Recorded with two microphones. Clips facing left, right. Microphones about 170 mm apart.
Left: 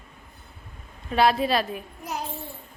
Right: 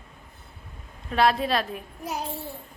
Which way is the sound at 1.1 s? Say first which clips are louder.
Left 1 dB; centre (ahead or behind).